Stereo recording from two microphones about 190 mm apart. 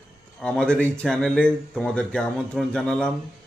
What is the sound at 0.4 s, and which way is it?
A man's voice, 5° left (ahead or behind).